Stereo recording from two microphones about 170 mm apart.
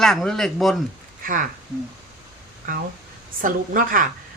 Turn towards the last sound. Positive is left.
turn(degrees=-55)  # may be behind; listen again after turning